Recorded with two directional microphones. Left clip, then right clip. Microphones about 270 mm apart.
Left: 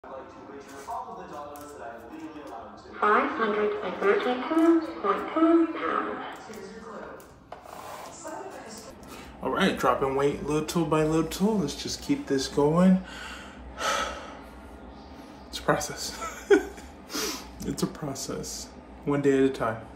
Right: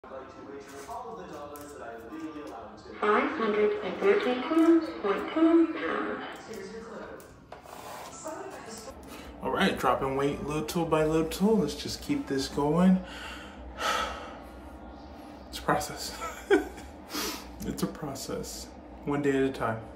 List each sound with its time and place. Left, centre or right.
3.0 s speech: centre
7.9 s a sound: centre
9.4 s speech: centre
15.5 s a woman's voice: centre